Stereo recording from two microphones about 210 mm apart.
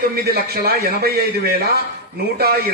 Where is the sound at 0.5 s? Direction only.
45° right (ahead or behind).